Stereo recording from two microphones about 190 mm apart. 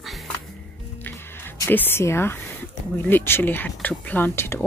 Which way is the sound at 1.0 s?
10° left (ahead or behind).